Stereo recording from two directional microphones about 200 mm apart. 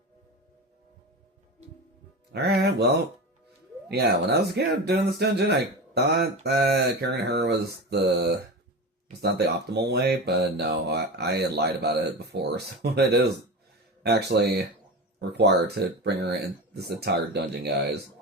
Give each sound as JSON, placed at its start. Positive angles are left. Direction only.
{"t": 2.3, "sound": "speech", "side_deg": -55}